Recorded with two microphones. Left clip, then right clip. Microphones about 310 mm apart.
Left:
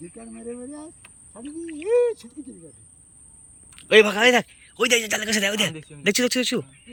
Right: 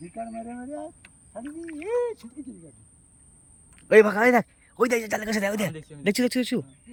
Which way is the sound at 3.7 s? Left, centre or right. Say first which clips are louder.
Left 1 dB; centre.